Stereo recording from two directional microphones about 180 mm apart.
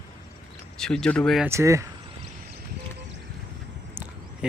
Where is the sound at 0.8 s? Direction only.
5° left (ahead or behind).